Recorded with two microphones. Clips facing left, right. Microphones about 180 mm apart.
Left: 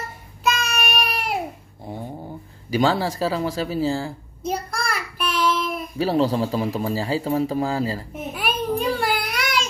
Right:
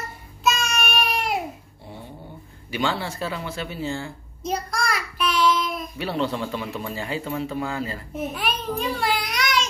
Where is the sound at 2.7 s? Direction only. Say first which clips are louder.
Left 6 dB; 35° left (ahead or behind).